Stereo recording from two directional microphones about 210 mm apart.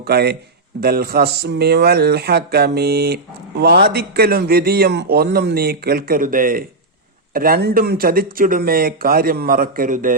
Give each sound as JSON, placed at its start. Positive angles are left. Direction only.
{"t": 0.0, "sound": "a man's voice", "side_deg": -50}